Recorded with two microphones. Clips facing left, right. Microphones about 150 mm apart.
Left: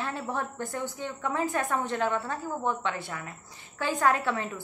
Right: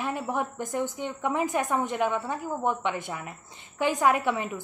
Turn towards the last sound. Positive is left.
turn(degrees=-15)  # may be behind; listen again after turning